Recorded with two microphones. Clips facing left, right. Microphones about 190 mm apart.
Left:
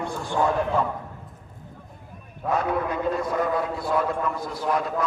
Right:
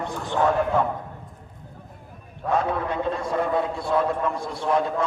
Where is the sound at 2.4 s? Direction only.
5° left (ahead or behind).